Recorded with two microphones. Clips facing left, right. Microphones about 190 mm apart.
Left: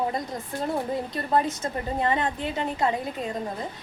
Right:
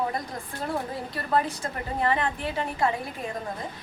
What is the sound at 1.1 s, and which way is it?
A woman's voice, 20° left (ahead or behind).